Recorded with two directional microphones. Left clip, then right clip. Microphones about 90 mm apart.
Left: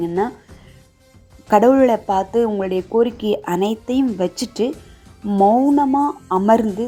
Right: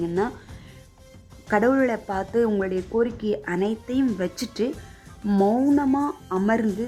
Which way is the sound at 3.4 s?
30° left (ahead or behind).